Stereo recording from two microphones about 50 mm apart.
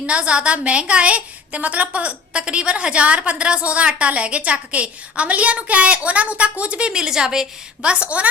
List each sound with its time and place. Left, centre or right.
0.0 s a woman's voice: right